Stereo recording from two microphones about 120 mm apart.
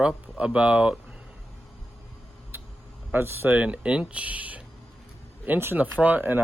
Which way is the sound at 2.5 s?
15° right (ahead or behind).